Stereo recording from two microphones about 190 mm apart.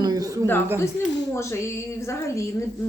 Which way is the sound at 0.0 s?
20° right (ahead or behind).